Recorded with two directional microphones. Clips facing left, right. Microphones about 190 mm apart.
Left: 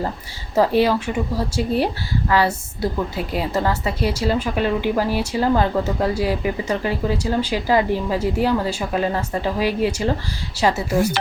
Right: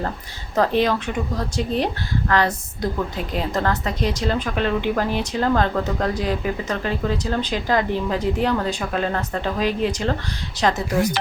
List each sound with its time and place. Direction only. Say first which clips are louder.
0.5 s speech: left 2 dB; 10° left (ahead or behind)